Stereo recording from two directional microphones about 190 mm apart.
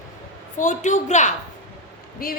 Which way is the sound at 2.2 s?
50° left (ahead or behind).